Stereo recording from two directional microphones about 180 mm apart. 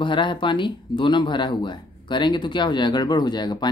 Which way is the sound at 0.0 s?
25° left (ahead or behind).